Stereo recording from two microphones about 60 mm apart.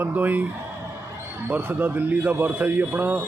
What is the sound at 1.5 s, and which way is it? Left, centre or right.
Speech, right.